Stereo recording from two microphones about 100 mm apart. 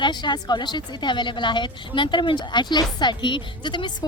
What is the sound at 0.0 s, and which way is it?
Speech, 50° left (ahead or behind).